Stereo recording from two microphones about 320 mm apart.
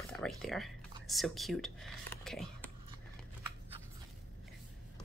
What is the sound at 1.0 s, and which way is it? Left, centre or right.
Speech, centre.